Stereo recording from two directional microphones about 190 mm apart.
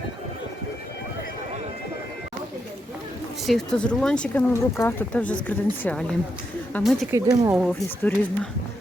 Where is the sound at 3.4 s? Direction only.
5° left (ahead or behind).